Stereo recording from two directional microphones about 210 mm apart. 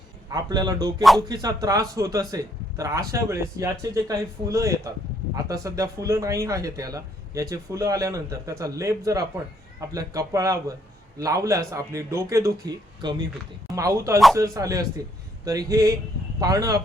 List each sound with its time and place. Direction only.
0.3 s a man's voice: 20° right (ahead or behind)